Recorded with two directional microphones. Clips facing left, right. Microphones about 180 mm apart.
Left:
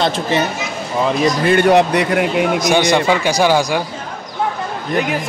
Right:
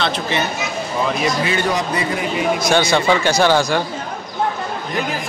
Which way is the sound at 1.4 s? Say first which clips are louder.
Left 8 dB; 55° left (ahead or behind).